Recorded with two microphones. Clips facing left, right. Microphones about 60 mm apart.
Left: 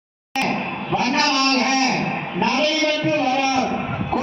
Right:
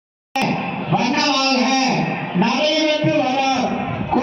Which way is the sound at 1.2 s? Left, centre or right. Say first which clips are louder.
Right 1 dB; left.